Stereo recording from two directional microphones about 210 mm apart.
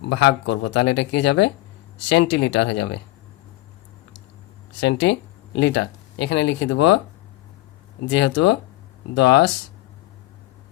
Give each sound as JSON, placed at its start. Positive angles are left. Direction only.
{"t": 0.0, "sound": "speech", "side_deg": 55}
{"t": 4.8, "sound": "speech", "side_deg": 55}
{"t": 8.1, "sound": "speech", "side_deg": 55}